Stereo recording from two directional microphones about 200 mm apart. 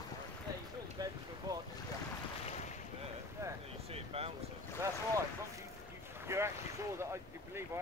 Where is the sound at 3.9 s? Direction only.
30° right (ahead or behind).